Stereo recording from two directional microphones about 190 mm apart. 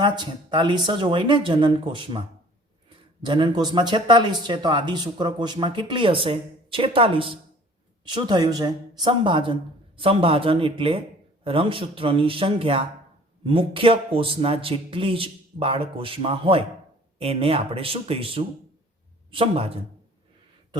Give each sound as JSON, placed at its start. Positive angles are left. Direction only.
{"t": 0.0, "sound": "speech", "side_deg": -25}
{"t": 3.2, "sound": "speech", "side_deg": -25}